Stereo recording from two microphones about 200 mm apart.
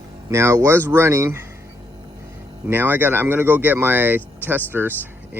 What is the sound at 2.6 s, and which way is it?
Speech, 10° right (ahead or behind).